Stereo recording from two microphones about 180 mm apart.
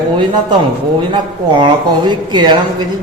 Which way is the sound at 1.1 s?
25° right (ahead or behind).